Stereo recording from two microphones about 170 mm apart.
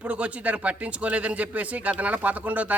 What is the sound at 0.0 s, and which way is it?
Speech, 5° right (ahead or behind).